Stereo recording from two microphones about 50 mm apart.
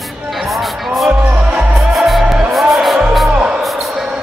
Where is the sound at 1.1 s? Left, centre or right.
Right.